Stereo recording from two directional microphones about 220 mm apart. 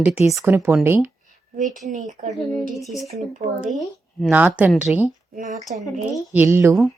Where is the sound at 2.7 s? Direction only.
Centre (ahead or behind).